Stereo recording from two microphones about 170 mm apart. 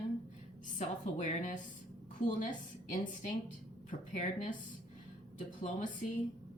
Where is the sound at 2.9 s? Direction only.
50° left (ahead or behind).